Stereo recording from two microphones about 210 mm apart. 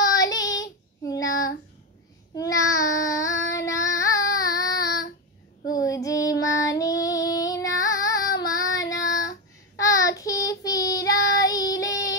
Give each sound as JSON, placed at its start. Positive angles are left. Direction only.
{"t": 0.0, "sound": "child singing", "side_deg": 15}
{"t": 6.7, "sound": "female singing", "side_deg": 15}